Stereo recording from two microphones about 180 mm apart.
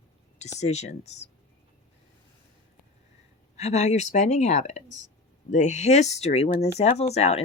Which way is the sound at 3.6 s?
35° left (ahead or behind).